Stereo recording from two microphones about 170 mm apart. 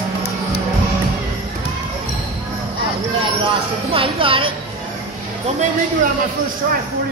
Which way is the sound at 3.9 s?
30° right (ahead or behind).